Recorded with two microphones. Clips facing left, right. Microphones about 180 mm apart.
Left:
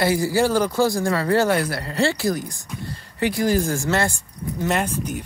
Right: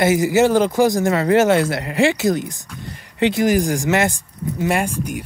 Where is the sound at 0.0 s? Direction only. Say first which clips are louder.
Right 4 dB; 20° right (ahead or behind).